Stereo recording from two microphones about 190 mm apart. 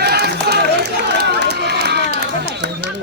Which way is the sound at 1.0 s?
60° right (ahead or behind).